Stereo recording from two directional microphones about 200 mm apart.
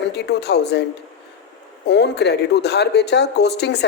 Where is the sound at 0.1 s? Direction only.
55° left (ahead or behind).